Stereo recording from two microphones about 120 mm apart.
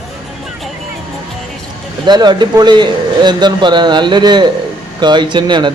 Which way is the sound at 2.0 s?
35° right (ahead or behind).